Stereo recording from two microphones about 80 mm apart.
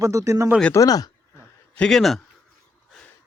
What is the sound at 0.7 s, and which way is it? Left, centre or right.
Speech, left.